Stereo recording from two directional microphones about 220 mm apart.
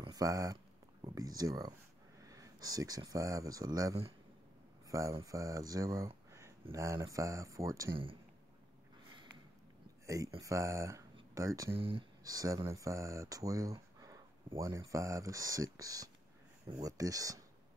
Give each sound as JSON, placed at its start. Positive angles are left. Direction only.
{"t": 0.0, "sound": "speech", "side_deg": -15}
{"t": 10.0, "sound": "speech", "side_deg": -15}